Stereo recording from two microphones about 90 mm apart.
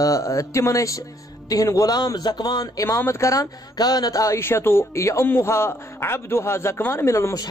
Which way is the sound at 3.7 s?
50° left (ahead or behind).